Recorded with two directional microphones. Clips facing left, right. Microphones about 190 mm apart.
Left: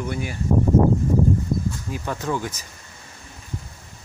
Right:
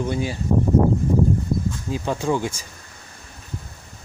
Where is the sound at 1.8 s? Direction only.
25° right (ahead or behind).